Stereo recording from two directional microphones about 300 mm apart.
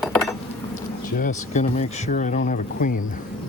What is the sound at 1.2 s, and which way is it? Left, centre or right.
Speech, left.